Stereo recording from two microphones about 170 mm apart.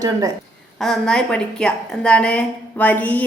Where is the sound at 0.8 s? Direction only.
5° left (ahead or behind).